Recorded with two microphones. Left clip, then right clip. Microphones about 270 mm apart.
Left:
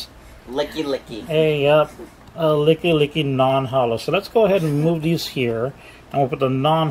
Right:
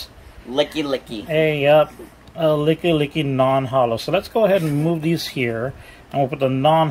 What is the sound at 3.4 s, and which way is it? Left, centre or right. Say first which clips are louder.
Speech: right 1 dB; centre.